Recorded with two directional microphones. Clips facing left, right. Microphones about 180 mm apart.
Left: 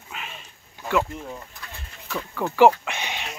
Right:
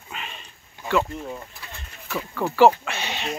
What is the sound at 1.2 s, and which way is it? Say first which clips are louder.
Pigeon: right 2 dB; 5° right (ahead or behind).